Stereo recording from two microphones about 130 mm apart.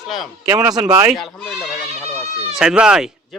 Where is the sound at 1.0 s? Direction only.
Centre (ahead or behind).